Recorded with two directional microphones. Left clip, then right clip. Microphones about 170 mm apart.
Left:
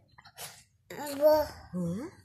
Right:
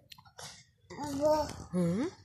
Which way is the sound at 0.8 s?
50° left (ahead or behind).